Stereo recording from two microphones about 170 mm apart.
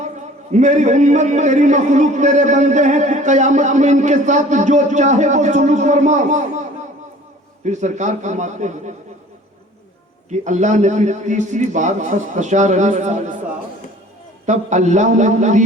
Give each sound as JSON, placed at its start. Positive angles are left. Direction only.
{"t": 0.5, "sound": "a man's voice", "side_deg": -45}
{"t": 10.2, "sound": "a man's voice", "side_deg": -45}
{"t": 14.4, "sound": "a man's voice", "side_deg": -45}